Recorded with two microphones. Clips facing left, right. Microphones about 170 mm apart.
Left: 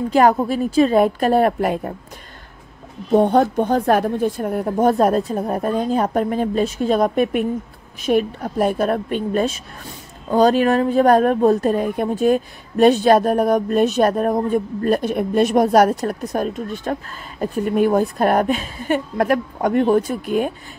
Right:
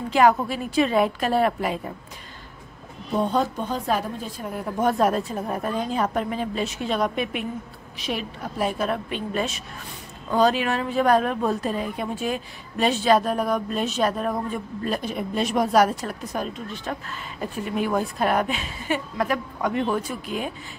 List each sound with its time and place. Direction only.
0.1 s speech: 45° left (ahead or behind)
3.2 s a woman's voice: 70° left (ahead or behind); by 4.7 s 50° left (ahead or behind)
4.7 s speech: 30° left (ahead or behind); by 20.5 s 55° left (ahead or behind)